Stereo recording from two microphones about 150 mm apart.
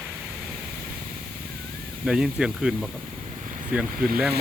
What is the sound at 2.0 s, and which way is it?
Speech, 5° right (ahead or behind).